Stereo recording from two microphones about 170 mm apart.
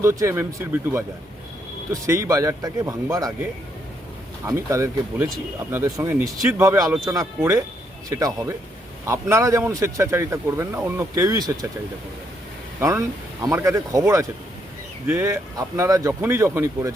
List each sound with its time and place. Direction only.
0.0 s a man's voice: 15° right (ahead or behind)
4.4 s a man's voice: 20° right (ahead or behind)
12.8 s a man's voice: 20° right (ahead or behind)